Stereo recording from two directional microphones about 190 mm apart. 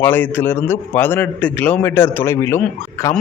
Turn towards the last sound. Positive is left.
turn(degrees=15)  # may be behind; listen again after turning